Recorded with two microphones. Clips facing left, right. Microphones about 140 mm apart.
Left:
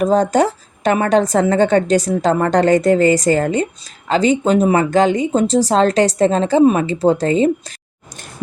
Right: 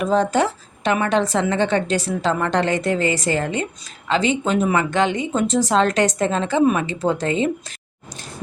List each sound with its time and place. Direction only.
0.0 s a woman's voice: 40° left (ahead or behind)